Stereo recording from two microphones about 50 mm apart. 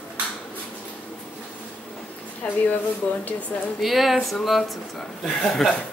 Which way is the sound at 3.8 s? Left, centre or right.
Centre.